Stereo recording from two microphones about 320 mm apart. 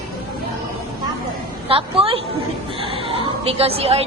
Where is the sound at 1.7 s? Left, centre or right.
Centre.